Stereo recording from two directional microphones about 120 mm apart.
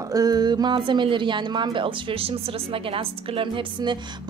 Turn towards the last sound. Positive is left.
turn(degrees=-40)  # may be behind; listen again after turning